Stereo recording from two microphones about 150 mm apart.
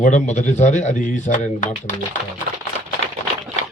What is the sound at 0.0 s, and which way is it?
Speech, 55° left (ahead or behind).